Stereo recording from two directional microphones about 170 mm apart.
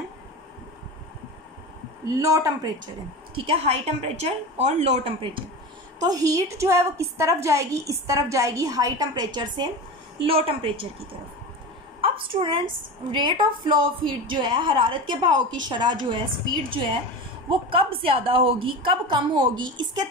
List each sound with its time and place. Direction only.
2.0 s a woman's voice: 20° right (ahead or behind)
3.3 s a woman's voice: 35° right (ahead or behind)
5.9 s a woman's voice: 20° right (ahead or behind)
12.0 s a woman's voice: 30° right (ahead or behind)
17.5 s a woman's voice: 30° right (ahead or behind)